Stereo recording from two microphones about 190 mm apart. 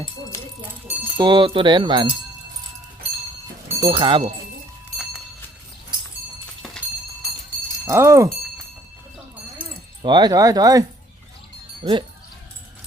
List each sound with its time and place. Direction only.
1.1 s speech: 25° right (ahead or behind)
3.8 s speech: 25° right (ahead or behind)
7.9 s speech: 15° right (ahead or behind)
10.0 s speech: 25° right (ahead or behind)